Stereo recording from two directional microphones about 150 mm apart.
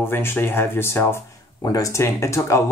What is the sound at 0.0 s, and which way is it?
Speech, 15° left (ahead or behind).